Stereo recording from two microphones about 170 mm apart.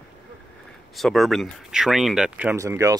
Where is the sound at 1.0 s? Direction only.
Centre (ahead or behind).